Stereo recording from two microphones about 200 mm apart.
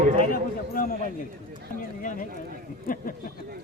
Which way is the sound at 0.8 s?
45° left (ahead or behind).